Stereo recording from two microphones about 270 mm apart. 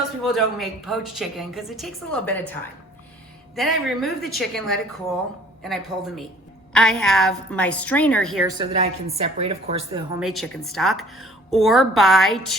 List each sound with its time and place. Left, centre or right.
0.2 s speech: centre
3.5 s speech: centre
8.4 s a woman's voice: centre
10.2 s speech: centre